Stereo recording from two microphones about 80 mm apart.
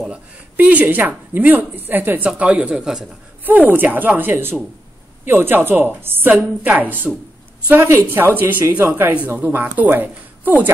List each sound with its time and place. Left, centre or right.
0.1 s speech: centre
3.4 s speech: right
7.7 s speech: right